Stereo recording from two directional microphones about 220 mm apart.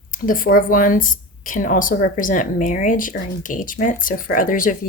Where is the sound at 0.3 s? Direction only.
40° left (ahead or behind).